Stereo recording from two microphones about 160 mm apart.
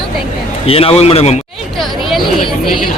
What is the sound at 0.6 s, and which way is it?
Speech, 35° left (ahead or behind).